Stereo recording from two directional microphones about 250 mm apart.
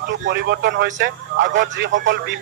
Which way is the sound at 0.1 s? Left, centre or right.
Right.